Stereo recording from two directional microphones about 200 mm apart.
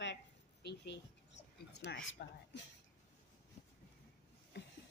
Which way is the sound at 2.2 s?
55° left (ahead or behind).